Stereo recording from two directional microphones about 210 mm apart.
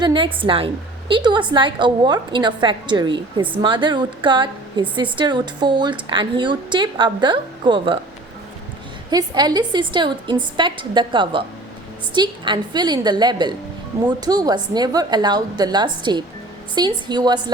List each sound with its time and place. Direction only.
0.0 s a woman's voice: 25° right (ahead or behind)
9.0 s a woman's voice: 20° right (ahead or behind)